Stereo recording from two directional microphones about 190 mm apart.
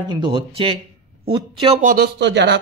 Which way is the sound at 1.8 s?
45° right (ahead or behind).